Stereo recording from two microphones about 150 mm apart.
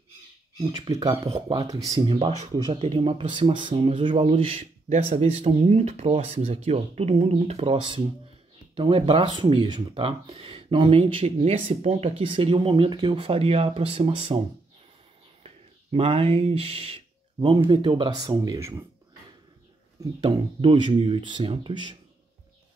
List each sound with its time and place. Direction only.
0.6 s speech: 30° right (ahead or behind)
2.0 s speech: 35° right (ahead or behind)
15.4 s speech: 40° right (ahead or behind); by 18.9 s 20° right (ahead or behind)
20.2 s speech: 35° right (ahead or behind)